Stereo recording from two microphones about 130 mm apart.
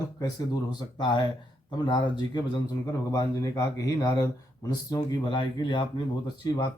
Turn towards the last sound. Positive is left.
turn(degrees=35)  # may be behind; listen again after turning